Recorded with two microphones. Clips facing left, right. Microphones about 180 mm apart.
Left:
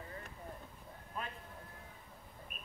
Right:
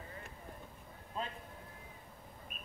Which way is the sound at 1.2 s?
25° right (ahead or behind).